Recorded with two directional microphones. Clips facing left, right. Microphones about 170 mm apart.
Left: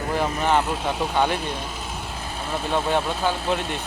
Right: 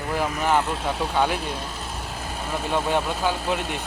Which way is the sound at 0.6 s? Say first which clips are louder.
Left 1 dB; 5° left (ahead or behind).